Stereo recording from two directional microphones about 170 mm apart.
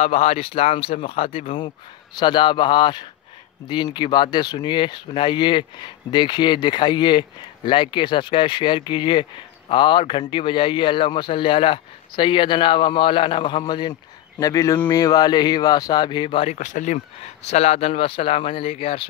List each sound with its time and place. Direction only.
0.0 s speech: 35° left (ahead or behind)
16.5 s speech: 50° left (ahead or behind)